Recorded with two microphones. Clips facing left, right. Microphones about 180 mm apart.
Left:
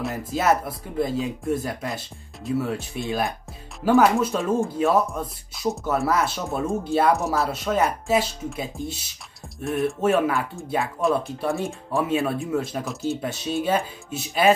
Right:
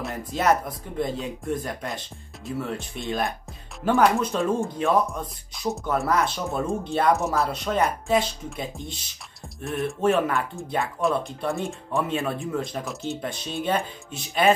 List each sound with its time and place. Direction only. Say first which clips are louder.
0.3 s speech: even; 5° left (ahead or behind)